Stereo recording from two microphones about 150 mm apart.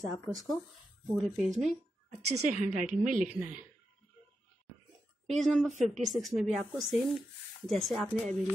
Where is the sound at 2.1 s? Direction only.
55° right (ahead or behind).